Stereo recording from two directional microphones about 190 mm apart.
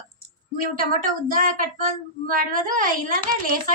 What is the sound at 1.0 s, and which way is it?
Speech, 45° right (ahead or behind).